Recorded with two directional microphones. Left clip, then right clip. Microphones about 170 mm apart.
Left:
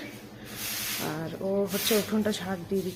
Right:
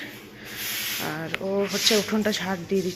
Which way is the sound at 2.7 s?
35° right (ahead or behind).